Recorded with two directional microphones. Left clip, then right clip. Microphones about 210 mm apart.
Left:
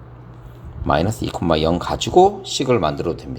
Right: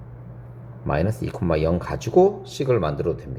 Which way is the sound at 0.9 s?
20° left (ahead or behind).